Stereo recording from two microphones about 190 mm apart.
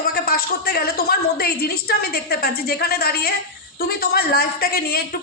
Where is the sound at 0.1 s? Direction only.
55° left (ahead or behind).